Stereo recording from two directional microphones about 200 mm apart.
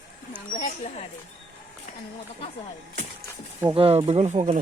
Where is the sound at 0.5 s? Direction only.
40° left (ahead or behind).